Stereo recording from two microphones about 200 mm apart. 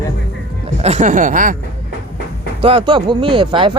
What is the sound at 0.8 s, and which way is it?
Speech, 35° right (ahead or behind).